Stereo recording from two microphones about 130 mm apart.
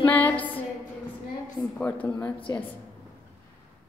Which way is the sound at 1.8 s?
10° left (ahead or behind).